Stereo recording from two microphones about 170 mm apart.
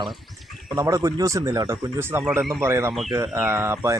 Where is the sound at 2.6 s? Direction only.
15° right (ahead or behind).